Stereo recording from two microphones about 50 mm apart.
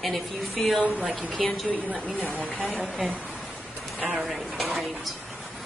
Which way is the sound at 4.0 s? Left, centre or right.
Right.